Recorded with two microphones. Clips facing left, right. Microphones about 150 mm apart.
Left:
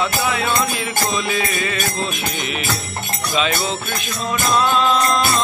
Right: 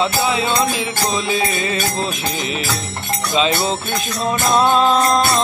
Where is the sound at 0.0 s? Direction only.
30° right (ahead or behind).